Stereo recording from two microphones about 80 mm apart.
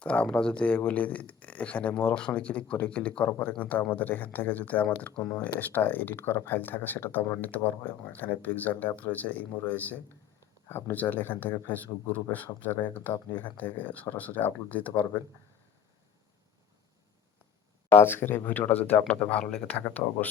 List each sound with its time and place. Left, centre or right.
0.0 s speech: centre
3.2 s speech: left
17.9 s speech: left; by 19.6 s centre
20.0 s speech: left